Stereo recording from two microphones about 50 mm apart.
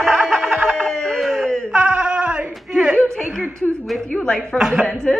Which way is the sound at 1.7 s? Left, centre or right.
Centre.